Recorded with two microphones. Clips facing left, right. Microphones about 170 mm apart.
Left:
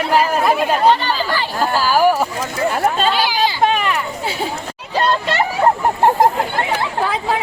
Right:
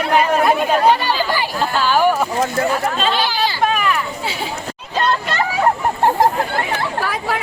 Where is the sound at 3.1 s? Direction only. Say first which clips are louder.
Left 2 dB; 10° left (ahead or behind).